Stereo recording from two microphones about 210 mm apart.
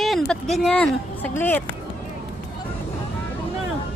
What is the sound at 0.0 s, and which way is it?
Speech, centre (ahead or behind).